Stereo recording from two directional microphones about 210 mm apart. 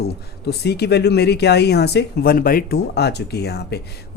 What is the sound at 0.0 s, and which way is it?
Speech, 50° left (ahead or behind).